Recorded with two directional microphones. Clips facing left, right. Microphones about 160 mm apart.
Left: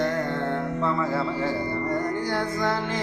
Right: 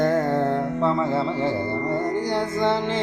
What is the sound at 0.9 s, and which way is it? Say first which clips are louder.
Speech: right 3 dB; 25° right (ahead or behind).